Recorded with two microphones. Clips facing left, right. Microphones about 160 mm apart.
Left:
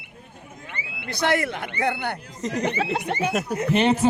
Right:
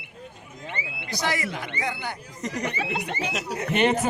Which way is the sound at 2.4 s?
20° left (ahead or behind).